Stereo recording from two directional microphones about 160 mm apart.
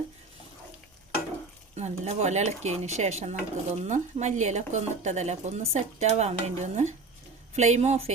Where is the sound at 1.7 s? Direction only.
45° right (ahead or behind).